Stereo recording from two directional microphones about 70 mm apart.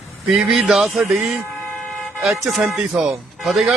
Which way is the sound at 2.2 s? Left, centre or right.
Centre.